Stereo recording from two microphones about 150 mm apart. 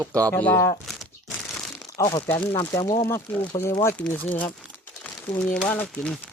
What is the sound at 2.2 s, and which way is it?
Speech, 15° left (ahead or behind).